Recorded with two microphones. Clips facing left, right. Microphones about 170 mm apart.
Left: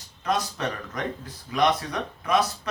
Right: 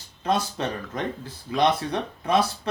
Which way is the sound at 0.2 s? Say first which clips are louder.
Right 2 dB; 30° right (ahead or behind).